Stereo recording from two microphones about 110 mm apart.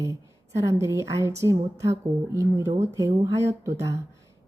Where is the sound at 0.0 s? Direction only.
30° right (ahead or behind).